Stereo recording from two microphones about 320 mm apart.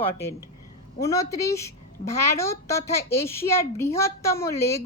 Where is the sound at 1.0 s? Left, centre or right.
Centre.